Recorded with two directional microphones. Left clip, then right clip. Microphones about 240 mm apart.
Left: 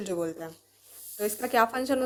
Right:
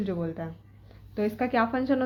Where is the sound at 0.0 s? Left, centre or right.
Left.